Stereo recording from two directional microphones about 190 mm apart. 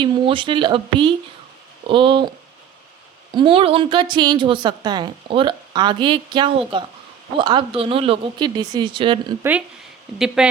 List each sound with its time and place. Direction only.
0.0 s a woman's voice: 25° right (ahead or behind)
3.3 s a woman's voice: 25° right (ahead or behind)
9.4 s speech: 5° right (ahead or behind)